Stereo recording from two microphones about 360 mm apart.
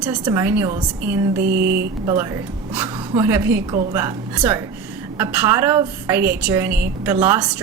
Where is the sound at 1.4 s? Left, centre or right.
Right.